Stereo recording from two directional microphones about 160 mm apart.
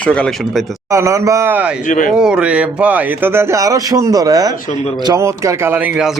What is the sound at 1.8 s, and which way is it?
Speech, 55° left (ahead or behind).